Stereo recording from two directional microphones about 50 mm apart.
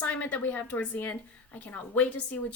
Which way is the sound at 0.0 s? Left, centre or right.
Left.